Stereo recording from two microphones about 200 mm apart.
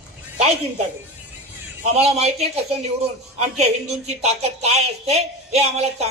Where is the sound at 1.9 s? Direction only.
30° right (ahead or behind).